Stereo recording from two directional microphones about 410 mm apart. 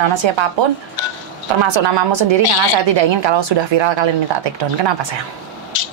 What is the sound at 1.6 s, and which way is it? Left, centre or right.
Speech, right.